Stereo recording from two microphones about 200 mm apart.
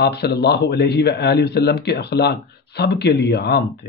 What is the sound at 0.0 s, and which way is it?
Speech, 55° left (ahead or behind).